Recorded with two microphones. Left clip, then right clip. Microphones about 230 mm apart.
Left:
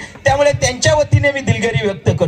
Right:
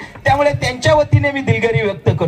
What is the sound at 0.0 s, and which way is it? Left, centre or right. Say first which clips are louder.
A man's voice: left 1 dB; left.